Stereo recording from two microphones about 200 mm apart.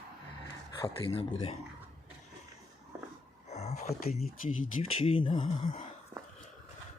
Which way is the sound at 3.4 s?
35° left (ahead or behind).